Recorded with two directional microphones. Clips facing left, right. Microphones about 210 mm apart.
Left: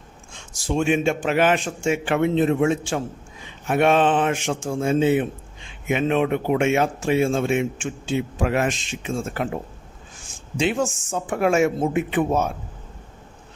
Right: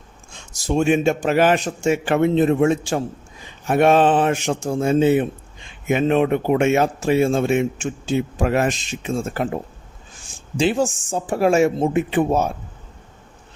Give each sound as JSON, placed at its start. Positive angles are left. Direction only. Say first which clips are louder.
{"t": 0.5, "sound": "speech", "louder": "right 3 dB", "side_deg": -40}
{"t": 10.6, "sound": "speech", "louder": "right 3 dB", "side_deg": -35}